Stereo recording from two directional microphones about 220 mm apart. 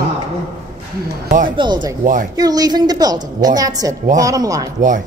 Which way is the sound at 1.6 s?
20° right (ahead or behind).